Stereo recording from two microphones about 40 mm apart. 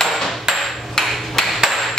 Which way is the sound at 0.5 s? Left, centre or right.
Centre.